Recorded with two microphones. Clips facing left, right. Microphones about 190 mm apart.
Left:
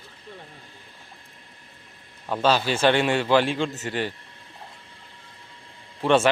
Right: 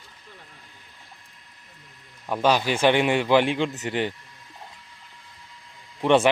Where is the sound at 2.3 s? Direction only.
15° right (ahead or behind).